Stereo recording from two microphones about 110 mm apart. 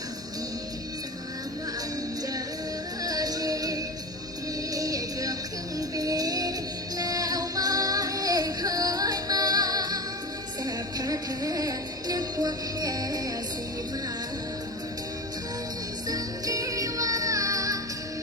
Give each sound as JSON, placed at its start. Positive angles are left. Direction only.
{"t": 3.0, "sound": "music", "side_deg": -35}
{"t": 16.0, "sound": "music", "side_deg": -35}